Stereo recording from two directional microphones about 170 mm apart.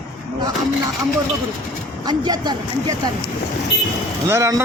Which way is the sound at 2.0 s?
25° right (ahead or behind).